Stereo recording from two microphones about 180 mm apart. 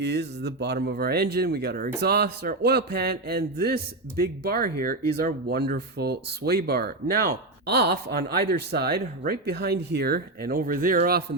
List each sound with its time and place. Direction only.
0.0 s speech: 70° right (ahead or behind); by 11.2 s 55° right (ahead or behind)